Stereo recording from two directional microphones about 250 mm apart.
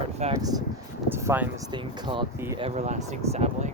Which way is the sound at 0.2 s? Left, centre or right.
Centre.